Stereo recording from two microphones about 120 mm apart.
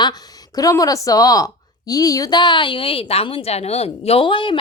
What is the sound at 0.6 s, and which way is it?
A woman's voice, 30° left (ahead or behind).